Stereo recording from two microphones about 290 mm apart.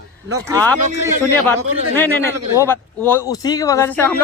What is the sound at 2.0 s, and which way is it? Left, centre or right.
A man's voice, centre.